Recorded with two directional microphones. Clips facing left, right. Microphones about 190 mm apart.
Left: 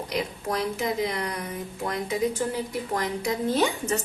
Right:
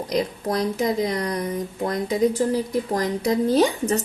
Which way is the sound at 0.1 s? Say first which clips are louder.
Right 6 dB; 40° right (ahead or behind).